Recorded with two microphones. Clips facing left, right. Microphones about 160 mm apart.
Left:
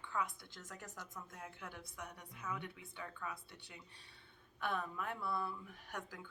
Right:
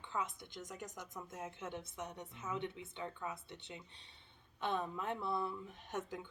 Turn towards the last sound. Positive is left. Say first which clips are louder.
# right 5 dB
turn(degrees=-20)  # may be behind; listen again after turning